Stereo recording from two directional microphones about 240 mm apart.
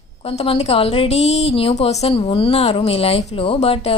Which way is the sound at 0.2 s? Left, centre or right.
Left.